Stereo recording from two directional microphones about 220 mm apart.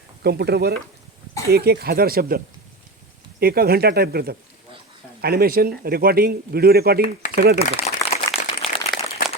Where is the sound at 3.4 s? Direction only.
45° right (ahead or behind).